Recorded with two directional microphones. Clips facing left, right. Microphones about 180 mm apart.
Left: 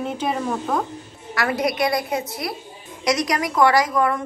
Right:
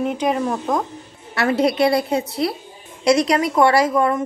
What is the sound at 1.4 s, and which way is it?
A woman's voice, 25° right (ahead or behind).